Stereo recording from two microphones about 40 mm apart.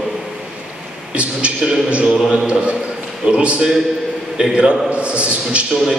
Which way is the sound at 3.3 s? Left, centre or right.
Right.